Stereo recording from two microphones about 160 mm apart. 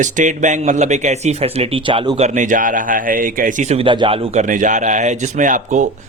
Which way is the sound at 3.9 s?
30° right (ahead or behind).